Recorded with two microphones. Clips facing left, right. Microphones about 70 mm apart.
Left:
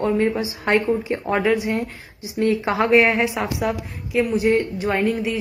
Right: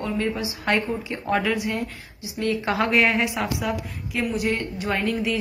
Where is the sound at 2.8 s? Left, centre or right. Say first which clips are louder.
Left 5 dB; left.